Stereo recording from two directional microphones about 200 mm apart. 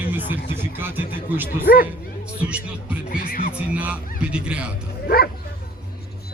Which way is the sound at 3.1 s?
45° left (ahead or behind).